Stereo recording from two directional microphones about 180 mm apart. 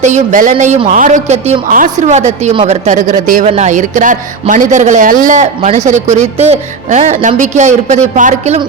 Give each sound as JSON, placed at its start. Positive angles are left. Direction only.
{"t": 0.0, "sound": "speech", "side_deg": -45}